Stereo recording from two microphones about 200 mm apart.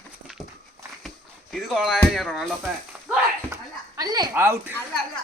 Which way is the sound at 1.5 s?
Centre (ahead or behind).